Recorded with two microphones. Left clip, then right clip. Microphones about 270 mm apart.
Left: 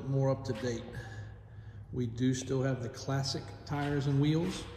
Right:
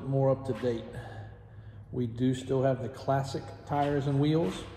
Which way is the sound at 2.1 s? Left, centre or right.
Centre.